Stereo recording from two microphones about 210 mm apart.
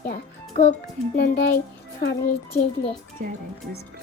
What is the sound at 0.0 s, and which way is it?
Music, 50° left (ahead or behind).